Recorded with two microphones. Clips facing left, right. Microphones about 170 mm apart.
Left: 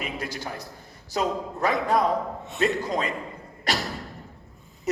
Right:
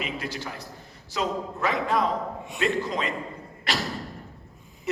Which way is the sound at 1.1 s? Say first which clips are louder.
Left 2 dB; 40° left (ahead or behind).